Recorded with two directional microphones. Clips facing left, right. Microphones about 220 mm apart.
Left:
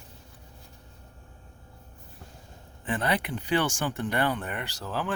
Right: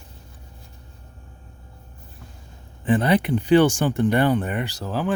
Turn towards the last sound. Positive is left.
turn(degrees=-15)  # may be behind; listen again after turning